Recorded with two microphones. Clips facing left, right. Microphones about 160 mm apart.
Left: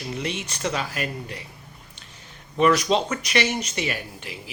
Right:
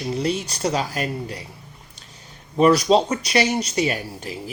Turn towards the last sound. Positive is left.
turn(degrees=-40)  # may be behind; listen again after turning